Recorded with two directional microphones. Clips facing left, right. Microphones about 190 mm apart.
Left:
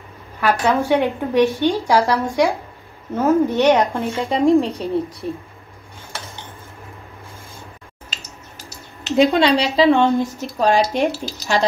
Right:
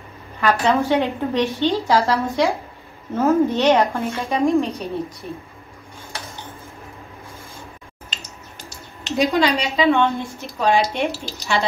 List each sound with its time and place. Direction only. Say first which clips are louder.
0.4 s a woman's voice: even; 10° left (ahead or behind)
4.3 s speech: left 3 dB; 30° left (ahead or behind)
9.1 s speech: left 4 dB; 25° left (ahead or behind)